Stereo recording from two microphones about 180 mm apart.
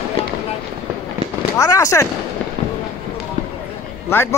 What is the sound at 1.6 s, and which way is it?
Speech, 20° left (ahead or behind).